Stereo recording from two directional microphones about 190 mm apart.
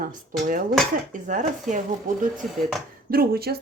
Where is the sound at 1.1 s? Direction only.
45° right (ahead or behind).